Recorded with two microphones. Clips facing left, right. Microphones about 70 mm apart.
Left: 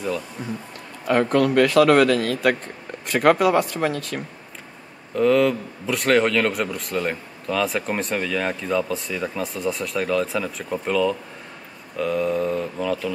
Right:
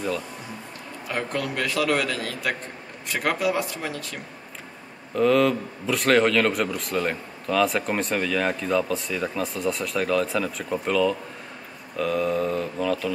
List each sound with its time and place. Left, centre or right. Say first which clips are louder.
1.0 s a man's voice: left 10 dB; left
5.1 s a man's voice: left 2 dB; centre